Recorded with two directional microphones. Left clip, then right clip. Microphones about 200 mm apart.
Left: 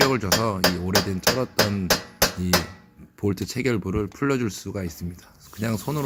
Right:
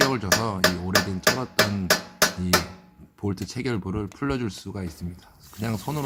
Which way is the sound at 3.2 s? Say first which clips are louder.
Left 5 dB; 15° left (ahead or behind).